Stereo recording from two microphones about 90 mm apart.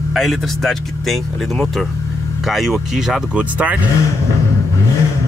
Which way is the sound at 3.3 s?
15° right (ahead or behind).